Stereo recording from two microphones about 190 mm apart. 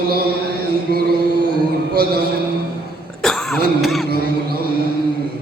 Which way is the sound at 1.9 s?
55° right (ahead or behind).